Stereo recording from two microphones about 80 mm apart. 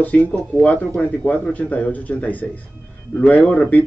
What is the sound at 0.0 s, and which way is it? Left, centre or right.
Speech, centre.